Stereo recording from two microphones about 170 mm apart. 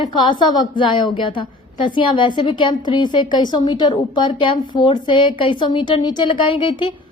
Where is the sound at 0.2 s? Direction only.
25° left (ahead or behind).